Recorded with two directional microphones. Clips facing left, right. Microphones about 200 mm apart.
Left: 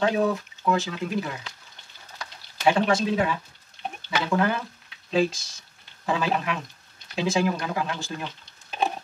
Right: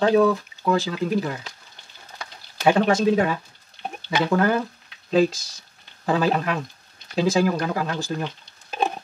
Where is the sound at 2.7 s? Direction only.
45° right (ahead or behind).